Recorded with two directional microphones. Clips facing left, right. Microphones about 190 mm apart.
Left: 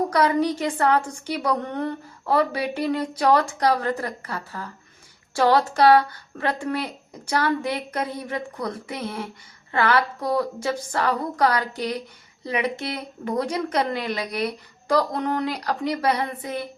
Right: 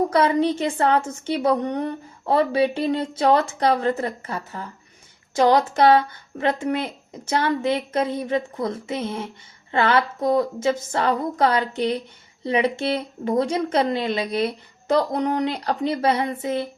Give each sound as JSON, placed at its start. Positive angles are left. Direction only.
{"t": 0.1, "sound": "a woman's voice", "side_deg": -25}